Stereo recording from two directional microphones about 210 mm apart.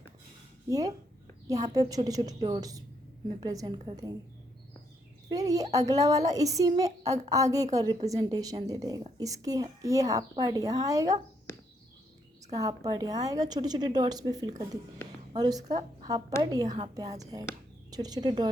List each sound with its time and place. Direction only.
0.7 s a woman's voice: 15° right (ahead or behind)
5.3 s a woman's voice: 15° right (ahead or behind)
12.5 s a woman's voice: 15° right (ahead or behind)